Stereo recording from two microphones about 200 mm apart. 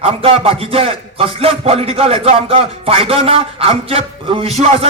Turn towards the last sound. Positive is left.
turn(degrees=-30)  # may be behind; listen again after turning